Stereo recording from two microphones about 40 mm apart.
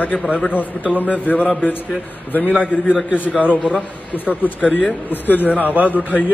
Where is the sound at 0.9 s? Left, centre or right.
Left.